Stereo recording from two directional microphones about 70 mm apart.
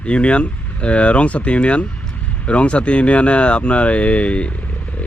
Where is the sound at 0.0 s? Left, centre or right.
Centre.